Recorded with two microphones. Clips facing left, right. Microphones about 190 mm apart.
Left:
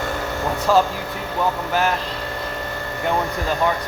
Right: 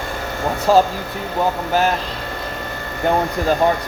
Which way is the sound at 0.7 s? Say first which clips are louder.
Right 3 dB; 35° right (ahead or behind).